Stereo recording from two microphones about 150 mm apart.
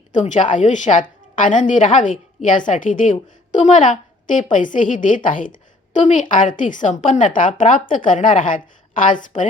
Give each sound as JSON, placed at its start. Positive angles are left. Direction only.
{"t": 0.1, "sound": "a woman's voice", "side_deg": 55}